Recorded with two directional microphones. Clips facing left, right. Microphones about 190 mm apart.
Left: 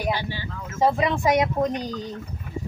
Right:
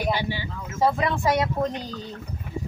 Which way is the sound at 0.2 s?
15° right (ahead or behind).